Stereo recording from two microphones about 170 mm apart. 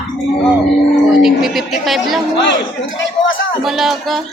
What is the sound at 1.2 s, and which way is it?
Speech, centre (ahead or behind).